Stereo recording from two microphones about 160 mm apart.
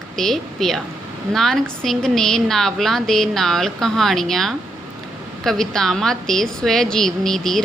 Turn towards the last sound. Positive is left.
turn(degrees=0)  # may be behind; listen again after turning